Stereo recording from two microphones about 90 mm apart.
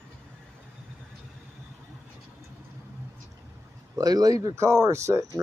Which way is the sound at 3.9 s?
45° right (ahead or behind).